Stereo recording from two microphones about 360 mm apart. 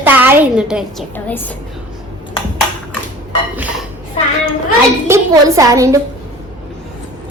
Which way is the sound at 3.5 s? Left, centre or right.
Centre.